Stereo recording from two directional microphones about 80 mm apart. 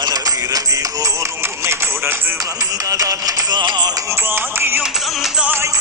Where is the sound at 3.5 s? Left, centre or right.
Right.